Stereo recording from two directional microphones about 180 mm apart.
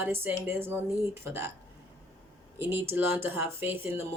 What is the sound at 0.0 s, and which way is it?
Speech, 10° right (ahead or behind).